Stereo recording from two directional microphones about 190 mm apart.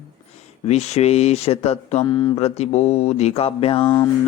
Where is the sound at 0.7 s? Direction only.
35° left (ahead or behind).